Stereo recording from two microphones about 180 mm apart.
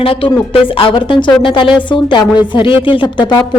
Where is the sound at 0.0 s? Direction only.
30° left (ahead or behind).